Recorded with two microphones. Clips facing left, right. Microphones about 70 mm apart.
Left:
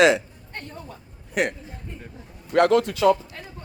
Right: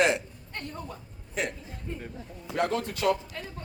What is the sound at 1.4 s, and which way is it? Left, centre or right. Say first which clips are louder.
Speech: left 8 dB; left.